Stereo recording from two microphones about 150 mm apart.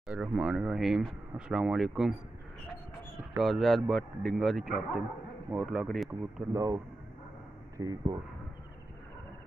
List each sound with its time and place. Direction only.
0.1 s speech: 5° right (ahead or behind)
3.3 s speech: centre (ahead or behind)
6.5 s speech: 20° right (ahead or behind)